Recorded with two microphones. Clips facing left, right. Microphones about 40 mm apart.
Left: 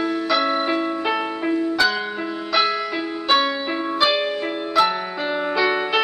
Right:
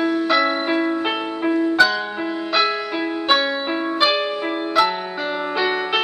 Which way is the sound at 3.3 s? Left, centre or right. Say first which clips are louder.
Left 1 dB; centre.